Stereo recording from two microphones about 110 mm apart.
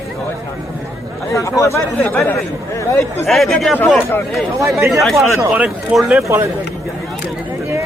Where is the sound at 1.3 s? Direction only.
30° left (ahead or behind).